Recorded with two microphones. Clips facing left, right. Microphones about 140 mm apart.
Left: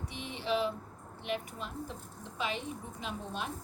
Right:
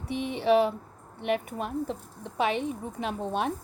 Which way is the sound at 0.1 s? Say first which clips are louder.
Right 11 dB; 55° right (ahead or behind).